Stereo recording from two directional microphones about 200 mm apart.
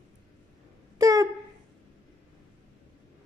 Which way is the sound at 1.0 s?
15° right (ahead or behind).